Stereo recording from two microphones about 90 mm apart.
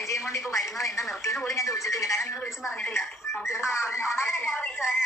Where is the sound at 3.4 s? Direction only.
30° left (ahead or behind).